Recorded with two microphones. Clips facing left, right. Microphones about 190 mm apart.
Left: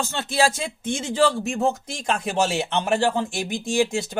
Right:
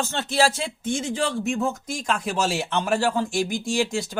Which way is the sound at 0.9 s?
25° left (ahead or behind).